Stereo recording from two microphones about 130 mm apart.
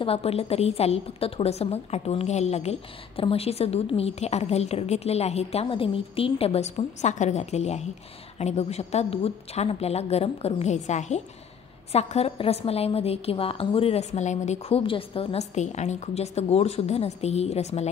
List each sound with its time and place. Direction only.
0.0 s a woman's voice: 50° left (ahead or behind)
15.5 s a woman's voice: 65° left (ahead or behind)